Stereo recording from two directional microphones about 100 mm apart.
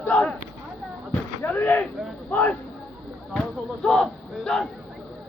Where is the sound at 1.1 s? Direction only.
20° left (ahead or behind).